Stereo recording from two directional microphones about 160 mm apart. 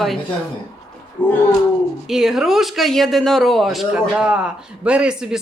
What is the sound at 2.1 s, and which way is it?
Speech, 5° right (ahead or behind).